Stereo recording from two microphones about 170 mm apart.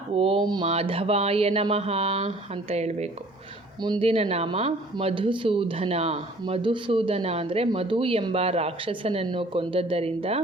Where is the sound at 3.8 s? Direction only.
25° right (ahead or behind).